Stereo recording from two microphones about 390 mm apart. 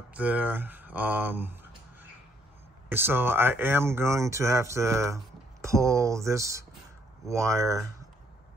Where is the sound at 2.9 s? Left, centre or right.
Centre.